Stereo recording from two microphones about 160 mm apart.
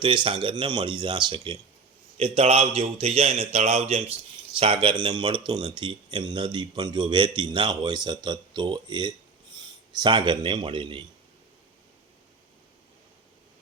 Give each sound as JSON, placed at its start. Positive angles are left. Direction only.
{"t": 0.0, "sound": "a man's voice", "side_deg": -30}